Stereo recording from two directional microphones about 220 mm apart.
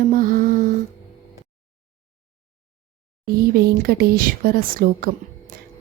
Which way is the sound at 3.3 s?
45° right (ahead or behind).